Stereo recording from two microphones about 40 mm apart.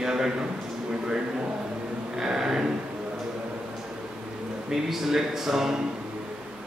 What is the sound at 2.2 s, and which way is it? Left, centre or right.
Speech, centre.